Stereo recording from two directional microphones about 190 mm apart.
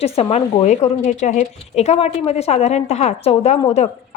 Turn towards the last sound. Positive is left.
turn(degrees=35)  # may be behind; listen again after turning